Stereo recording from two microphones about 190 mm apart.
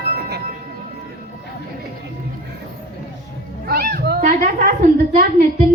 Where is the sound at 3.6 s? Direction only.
50° right (ahead or behind).